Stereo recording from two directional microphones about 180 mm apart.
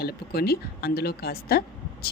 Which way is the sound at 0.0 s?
60° left (ahead or behind).